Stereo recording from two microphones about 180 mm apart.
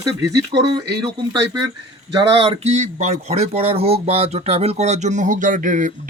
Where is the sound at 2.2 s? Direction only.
30° right (ahead or behind).